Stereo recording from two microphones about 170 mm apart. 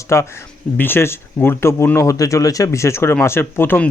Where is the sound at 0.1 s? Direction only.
15° left (ahead or behind).